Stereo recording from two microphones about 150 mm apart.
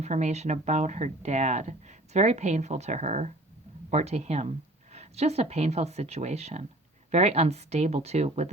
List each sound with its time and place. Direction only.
0.0 s a woman's voice: 50° right (ahead or behind)